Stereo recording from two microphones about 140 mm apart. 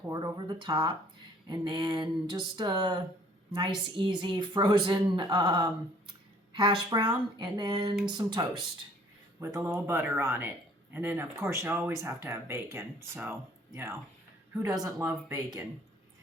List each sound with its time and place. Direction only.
0.0 s speech: 25° right (ahead or behind)